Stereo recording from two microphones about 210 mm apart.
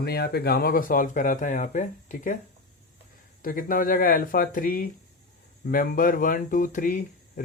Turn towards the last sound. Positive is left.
turn(degrees=40)  # may be behind; listen again after turning